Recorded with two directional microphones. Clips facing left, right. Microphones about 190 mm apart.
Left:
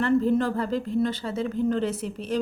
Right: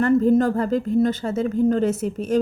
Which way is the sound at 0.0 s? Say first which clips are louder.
Right 5 dB; 45° right (ahead or behind).